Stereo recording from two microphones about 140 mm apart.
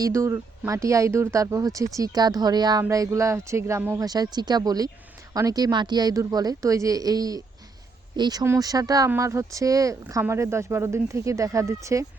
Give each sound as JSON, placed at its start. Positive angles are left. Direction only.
{"t": 0.0, "sound": "speech", "side_deg": -20}